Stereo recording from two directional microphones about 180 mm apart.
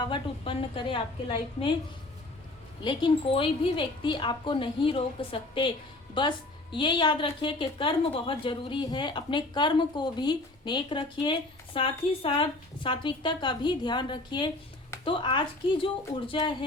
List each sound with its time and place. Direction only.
0.0 s a woman's voice: 30° left (ahead or behind)
2.8 s a woman's voice: 25° left (ahead or behind)